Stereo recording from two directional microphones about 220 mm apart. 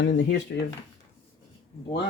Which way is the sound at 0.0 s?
50° left (ahead or behind).